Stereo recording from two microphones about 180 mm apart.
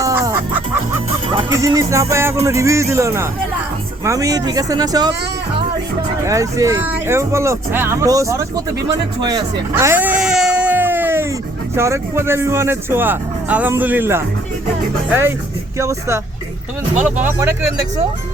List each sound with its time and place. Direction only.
0.0 s music: 15° right (ahead or behind)
1.5 s speech: 15° right (ahead or behind)
6.2 s speech: 15° right (ahead or behind)
9.7 s baby cry: 10° right (ahead or behind)
11.7 s speech: 15° right (ahead or behind)
15.8 s speech: 15° right (ahead or behind)